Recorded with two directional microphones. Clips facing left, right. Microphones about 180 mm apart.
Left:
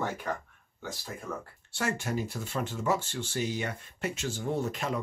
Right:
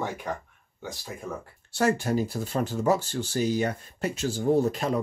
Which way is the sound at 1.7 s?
35° right (ahead or behind).